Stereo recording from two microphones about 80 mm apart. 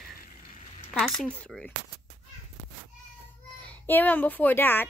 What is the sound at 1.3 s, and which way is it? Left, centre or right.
Speech, centre.